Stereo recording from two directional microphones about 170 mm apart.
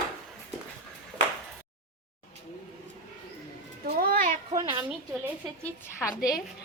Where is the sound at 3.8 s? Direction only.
60° right (ahead or behind).